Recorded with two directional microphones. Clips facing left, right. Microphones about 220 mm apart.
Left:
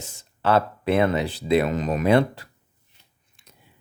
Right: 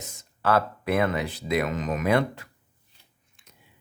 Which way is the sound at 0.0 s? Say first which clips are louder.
Left 2 dB; 30° left (ahead or behind).